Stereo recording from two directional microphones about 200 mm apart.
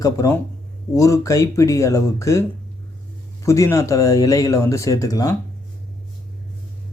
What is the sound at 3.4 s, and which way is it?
Speech, 15° left (ahead or behind).